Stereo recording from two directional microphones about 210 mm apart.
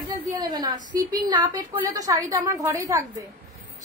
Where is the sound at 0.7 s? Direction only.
40° right (ahead or behind).